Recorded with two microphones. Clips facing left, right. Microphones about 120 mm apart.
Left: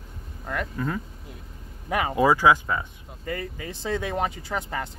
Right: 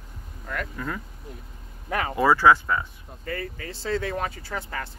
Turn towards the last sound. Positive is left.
turn(degrees=20)  # may be behind; listen again after turning